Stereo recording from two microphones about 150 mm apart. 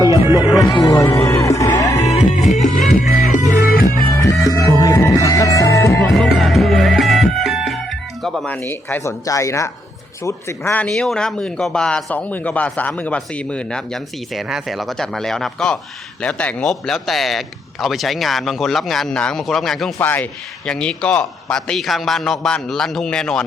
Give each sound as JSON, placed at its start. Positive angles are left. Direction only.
{"t": 0.4, "sound": "speech", "side_deg": 0}
{"t": 0.7, "sound": "music", "side_deg": 25}
{"t": 1.0, "sound": "music", "side_deg": 15}
{"t": 2.6, "sound": "music", "side_deg": 55}
{"t": 3.7, "sound": "music", "side_deg": 85}
{"t": 4.2, "sound": "music", "side_deg": 20}
{"t": 6.1, "sound": "music", "side_deg": 0}
{"t": 8.6, "sound": "music", "side_deg": 15}
{"t": 10.2, "sound": "speech", "side_deg": 15}
{"t": 10.8, "sound": "speech", "side_deg": 5}